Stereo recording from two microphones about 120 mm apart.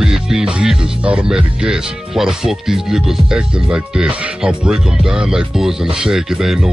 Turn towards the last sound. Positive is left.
turn(degrees=-5)  # may be behind; listen again after turning